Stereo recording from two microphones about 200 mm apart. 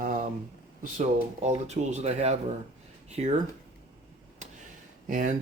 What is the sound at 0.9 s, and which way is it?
Speech, 35° right (ahead or behind).